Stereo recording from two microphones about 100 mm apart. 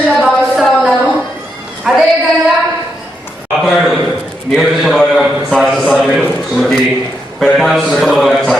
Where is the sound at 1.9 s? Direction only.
5° right (ahead or behind).